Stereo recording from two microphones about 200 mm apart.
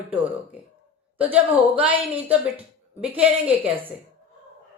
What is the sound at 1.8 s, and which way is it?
Speech, 10° right (ahead or behind).